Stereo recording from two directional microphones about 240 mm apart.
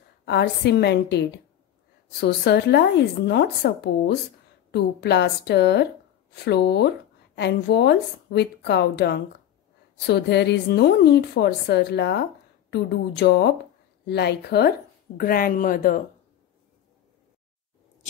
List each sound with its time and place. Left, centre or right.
0.2 s a woman's voice: left